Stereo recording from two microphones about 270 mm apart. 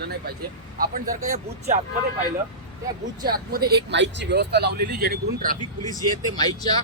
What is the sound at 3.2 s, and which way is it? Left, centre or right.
Speech, right.